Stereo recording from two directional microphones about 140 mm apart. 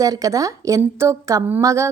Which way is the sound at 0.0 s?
25° right (ahead or behind).